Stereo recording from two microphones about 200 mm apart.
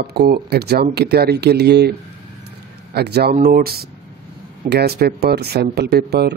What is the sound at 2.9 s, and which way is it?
Speech, 55° right (ahead or behind).